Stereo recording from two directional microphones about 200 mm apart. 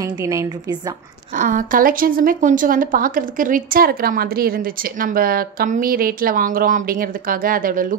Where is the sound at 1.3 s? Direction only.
40° right (ahead or behind).